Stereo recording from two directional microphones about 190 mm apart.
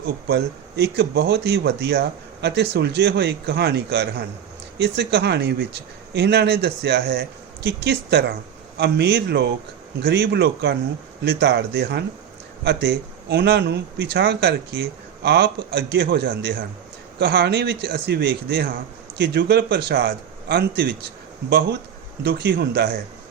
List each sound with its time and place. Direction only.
0.0 s speech: 60° right (ahead or behind)
22.2 s speech: 60° right (ahead or behind)